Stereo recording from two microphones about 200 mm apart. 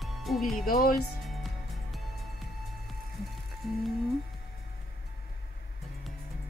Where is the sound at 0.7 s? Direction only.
45° left (ahead or behind).